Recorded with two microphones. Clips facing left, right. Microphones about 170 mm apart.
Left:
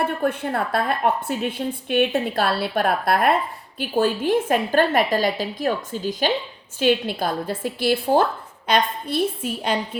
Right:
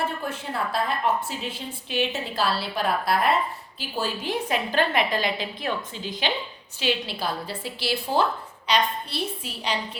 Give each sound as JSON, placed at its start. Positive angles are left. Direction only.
{"t": 0.2, "sound": "a woman's voice", "side_deg": 55}